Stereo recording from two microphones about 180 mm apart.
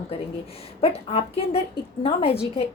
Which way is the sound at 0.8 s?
35° left (ahead or behind).